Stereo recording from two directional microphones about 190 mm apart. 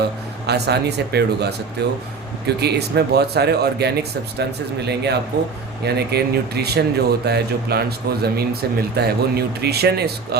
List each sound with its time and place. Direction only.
0.4 s speech: 60° right (ahead or behind)